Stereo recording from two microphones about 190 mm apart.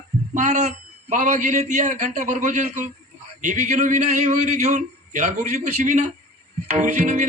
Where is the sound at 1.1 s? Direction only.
40° right (ahead or behind).